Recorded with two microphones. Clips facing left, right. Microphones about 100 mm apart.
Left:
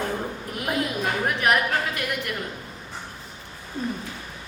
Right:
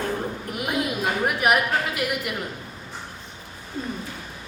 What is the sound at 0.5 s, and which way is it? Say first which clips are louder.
Speech: even; 5° right (ahead or behind).